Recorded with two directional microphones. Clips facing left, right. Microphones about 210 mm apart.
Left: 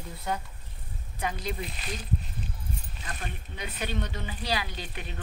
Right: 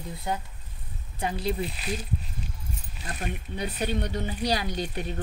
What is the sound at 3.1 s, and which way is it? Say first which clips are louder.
Speech: right 6 dB; 35° right (ahead or behind).